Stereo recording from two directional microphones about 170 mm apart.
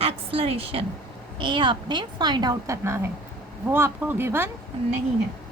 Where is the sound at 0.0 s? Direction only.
35° right (ahead or behind); by 4.4 s 15° right (ahead or behind).